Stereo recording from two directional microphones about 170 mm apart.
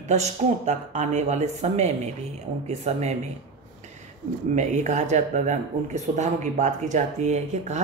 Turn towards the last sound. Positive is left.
turn(degrees=-45)  # may be behind; listen again after turning